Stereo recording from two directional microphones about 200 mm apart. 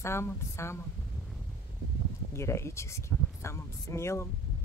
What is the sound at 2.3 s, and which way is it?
Speech, 15° left (ahead or behind).